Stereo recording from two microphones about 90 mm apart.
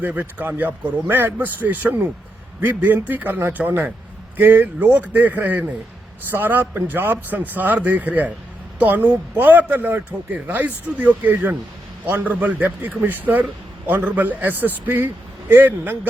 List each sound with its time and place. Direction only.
0.0 s a man's voice: 20° right (ahead or behind)